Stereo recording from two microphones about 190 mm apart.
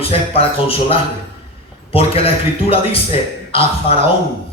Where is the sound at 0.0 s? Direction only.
30° left (ahead or behind).